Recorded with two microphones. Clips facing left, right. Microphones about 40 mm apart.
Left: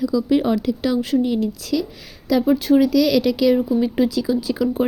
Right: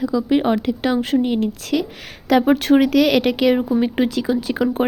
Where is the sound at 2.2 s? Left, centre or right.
Right.